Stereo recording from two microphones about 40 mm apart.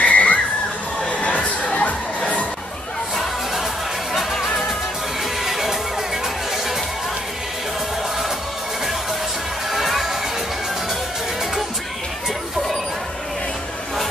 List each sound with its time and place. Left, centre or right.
0.0 s whistle: left
1.0 s crowd: left
4.1 s music: centre
9.7 s music: centre